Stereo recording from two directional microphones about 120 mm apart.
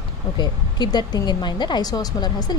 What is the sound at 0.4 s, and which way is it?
Speech, 35° left (ahead or behind).